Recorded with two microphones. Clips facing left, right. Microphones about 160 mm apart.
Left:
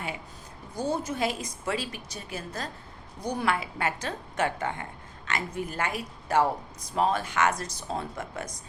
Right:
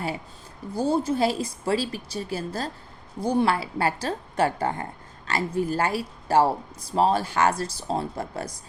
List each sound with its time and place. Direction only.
0.7 s speech: 30° right (ahead or behind)